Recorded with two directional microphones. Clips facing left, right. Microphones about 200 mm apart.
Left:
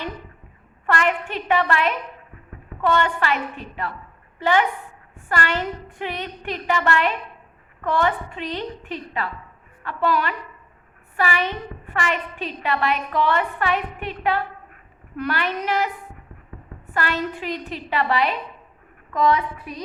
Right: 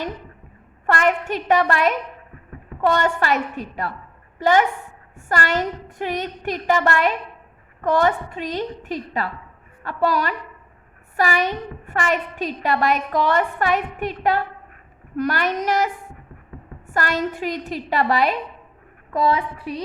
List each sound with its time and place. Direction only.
0.9 s a woman's voice: 40° right (ahead or behind)
19.1 s a woman's voice: 30° right (ahead or behind)